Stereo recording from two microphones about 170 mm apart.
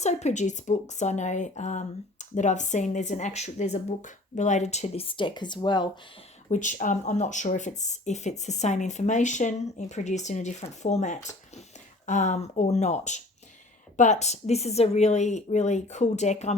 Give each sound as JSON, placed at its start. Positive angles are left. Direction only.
{"t": 0.0, "sound": "speech", "side_deg": 40}
{"t": 6.5, "sound": "speech", "side_deg": 45}